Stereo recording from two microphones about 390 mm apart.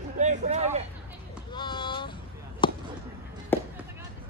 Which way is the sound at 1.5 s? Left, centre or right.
Centre.